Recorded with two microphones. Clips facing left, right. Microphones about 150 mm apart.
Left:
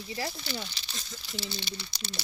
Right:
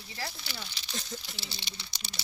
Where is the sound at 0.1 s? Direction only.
15° left (ahead or behind).